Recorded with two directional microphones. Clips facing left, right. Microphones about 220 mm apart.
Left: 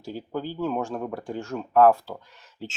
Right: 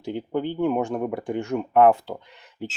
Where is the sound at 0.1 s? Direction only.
20° right (ahead or behind).